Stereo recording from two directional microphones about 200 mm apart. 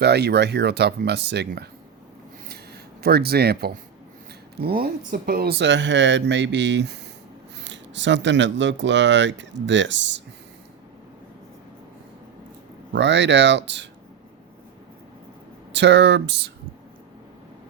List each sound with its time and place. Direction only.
0.0 s speech: 55° right (ahead or behind)
3.0 s speech: 50° right (ahead or behind)
12.9 s speech: 60° right (ahead or behind)
15.7 s speech: 60° right (ahead or behind)